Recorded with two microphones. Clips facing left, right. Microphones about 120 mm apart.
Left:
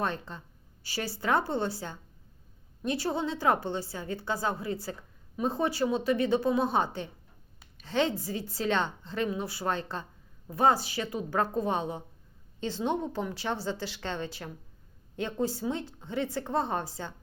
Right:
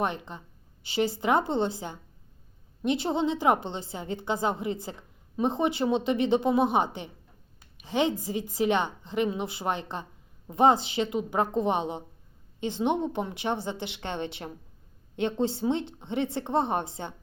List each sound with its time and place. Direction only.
0.0 s a woman's voice: 15° right (ahead or behind)